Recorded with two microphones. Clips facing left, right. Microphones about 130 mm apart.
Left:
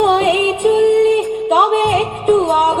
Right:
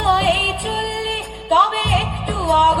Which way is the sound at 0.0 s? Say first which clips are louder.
Left 4 dB; 45° left (ahead or behind).